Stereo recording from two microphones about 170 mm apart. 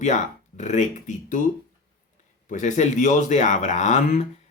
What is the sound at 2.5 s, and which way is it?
Speech, 45° left (ahead or behind).